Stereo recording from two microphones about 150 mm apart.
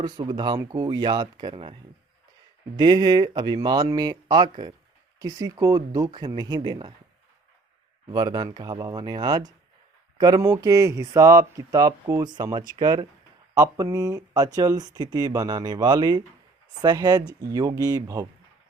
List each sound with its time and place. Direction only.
0.0 s speech: 30° right (ahead or behind)
2.7 s speech: 25° right (ahead or behind)
8.1 s speech: 25° right (ahead or behind)